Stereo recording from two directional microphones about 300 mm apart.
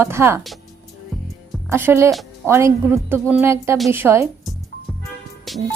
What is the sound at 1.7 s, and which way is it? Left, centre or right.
A woman's voice, centre.